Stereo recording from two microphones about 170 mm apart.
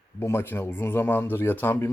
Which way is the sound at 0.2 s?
15° left (ahead or behind).